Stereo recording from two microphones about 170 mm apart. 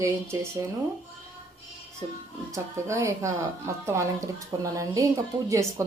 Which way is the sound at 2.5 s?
15° right (ahead or behind).